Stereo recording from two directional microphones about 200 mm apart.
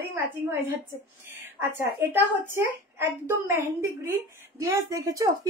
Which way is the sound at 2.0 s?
15° right (ahead or behind).